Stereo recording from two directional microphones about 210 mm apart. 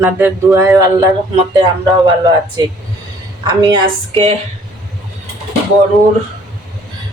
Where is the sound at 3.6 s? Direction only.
20° right (ahead or behind).